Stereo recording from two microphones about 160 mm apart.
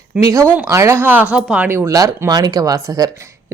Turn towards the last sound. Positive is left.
turn(degrees=-20)  # may be behind; listen again after turning